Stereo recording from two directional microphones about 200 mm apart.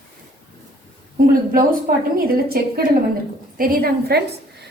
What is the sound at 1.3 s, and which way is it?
A woman's voice, 45° right (ahead or behind).